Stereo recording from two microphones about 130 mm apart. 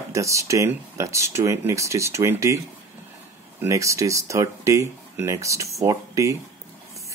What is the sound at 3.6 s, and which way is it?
Speech, 25° right (ahead or behind).